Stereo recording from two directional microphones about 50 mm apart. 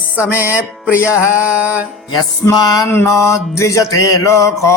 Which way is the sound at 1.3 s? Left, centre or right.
Right.